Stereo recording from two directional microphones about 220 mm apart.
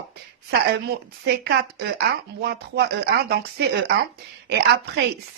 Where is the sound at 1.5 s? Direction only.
50° right (ahead or behind).